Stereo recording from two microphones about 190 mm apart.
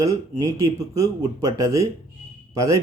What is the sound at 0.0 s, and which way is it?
Speech, 20° right (ahead or behind).